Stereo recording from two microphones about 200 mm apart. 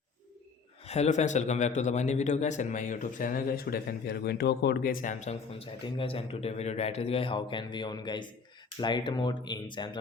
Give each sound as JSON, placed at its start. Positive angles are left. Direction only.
{"t": 0.9, "sound": "a man's voice", "side_deg": 35}